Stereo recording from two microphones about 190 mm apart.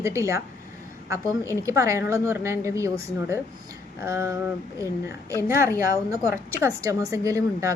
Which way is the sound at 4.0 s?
15° right (ahead or behind).